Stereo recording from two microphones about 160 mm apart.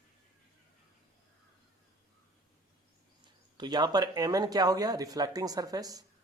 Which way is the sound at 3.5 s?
25° right (ahead or behind).